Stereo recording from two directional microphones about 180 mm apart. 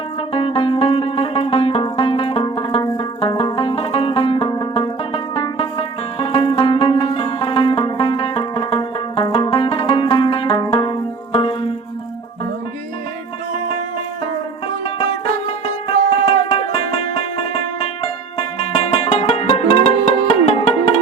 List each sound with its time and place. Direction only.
0.3 s music: 30° left (ahead or behind)
15.6 s music: 30° left (ahead or behind)